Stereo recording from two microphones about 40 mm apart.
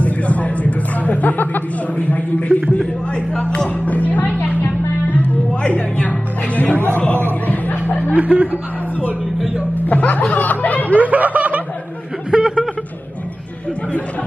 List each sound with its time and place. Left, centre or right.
0.0 s speech: left
3.3 s music: left
3.8 s music: left
8.2 s chuckle: right
9.8 s snicker: left
11.0 s snicker: right
12.3 s a sound: right